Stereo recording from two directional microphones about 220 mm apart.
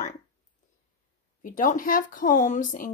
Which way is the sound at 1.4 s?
40° left (ahead or behind).